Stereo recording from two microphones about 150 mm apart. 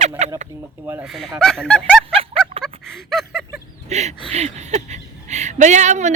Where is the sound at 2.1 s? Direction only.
40° right (ahead or behind).